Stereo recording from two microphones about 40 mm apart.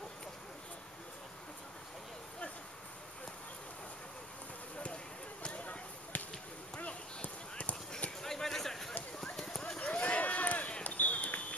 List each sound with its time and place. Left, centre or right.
5.5 s basketball bounce: left
6.8 s clip-clop: left
8.2 s a sound: centre
9.8 s run: left
10.8 s basketball bounce: left